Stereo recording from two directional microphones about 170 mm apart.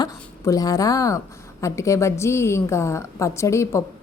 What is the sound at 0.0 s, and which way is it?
A woman's voice, 20° left (ahead or behind).